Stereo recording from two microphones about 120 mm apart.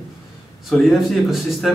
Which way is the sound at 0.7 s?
Centre (ahead or behind).